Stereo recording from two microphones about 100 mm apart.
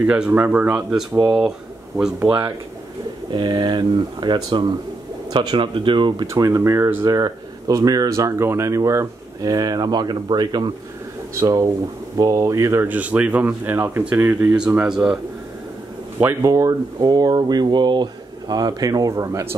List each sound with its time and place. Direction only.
0.1 s speech: 15° right (ahead or behind)
2.1 s a man's voice: 20° right (ahead or behind)
3.3 s speech: 50° right (ahead or behind)
6.2 s a man's voice: 30° right (ahead or behind)
7.1 s a man's voice: 40° right (ahead or behind); by 15.1 s 5° right (ahead or behind)
16.4 s speech: 35° right (ahead or behind)